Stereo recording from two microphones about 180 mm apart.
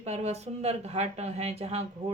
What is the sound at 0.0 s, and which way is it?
Speech, 35° right (ahead or behind).